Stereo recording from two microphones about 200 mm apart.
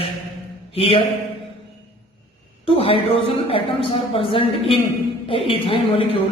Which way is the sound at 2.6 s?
30° left (ahead or behind).